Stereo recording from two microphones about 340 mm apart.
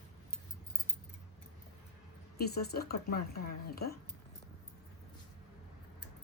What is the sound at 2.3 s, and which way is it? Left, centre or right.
Speech, left.